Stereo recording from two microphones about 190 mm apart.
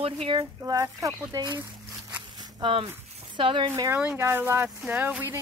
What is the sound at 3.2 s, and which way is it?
Speech, 25° right (ahead or behind).